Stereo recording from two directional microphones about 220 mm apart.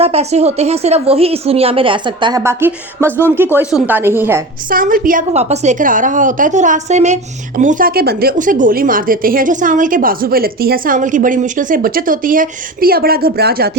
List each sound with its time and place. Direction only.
0.0 s a woman's voice: 30° right (ahead or behind); by 4.4 s 10° right (ahead or behind)
4.7 s a woman's voice: 40° right (ahead or behind)